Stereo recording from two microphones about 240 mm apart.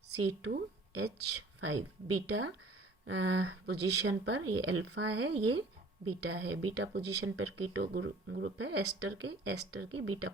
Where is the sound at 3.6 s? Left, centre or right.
Right.